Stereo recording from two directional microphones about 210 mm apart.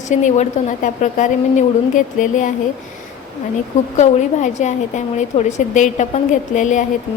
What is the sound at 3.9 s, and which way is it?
A woman's voice, 35° left (ahead or behind).